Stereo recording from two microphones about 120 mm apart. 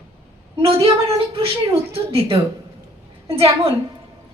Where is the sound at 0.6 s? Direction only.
50° right (ahead or behind).